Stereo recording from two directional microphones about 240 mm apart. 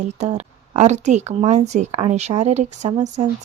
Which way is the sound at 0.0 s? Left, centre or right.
Right.